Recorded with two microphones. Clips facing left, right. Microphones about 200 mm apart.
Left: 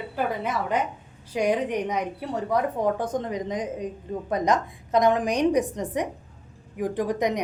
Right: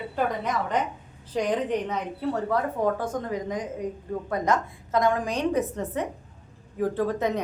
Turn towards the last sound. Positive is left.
turn(degrees=15)  # may be behind; listen again after turning